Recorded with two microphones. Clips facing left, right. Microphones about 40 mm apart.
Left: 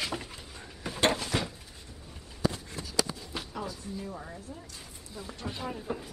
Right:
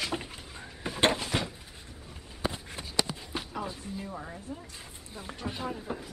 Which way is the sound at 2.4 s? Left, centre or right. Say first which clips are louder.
Left 2 dB; right.